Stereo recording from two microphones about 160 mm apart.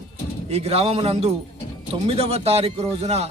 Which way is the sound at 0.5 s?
40° right (ahead or behind).